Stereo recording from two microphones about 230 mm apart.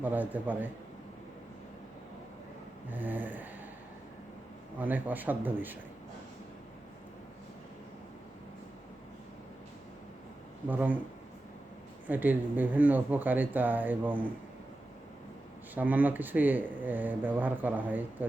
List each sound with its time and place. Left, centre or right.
0.0 s speech: centre
2.9 s speech: centre
4.8 s speech: centre
10.7 s speech: centre
12.0 s speech: centre
15.7 s speech: centre